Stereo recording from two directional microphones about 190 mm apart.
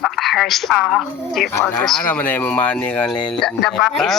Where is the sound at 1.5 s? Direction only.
15° left (ahead or behind).